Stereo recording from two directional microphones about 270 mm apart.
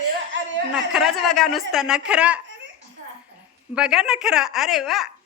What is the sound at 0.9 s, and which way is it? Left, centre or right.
Speech, centre.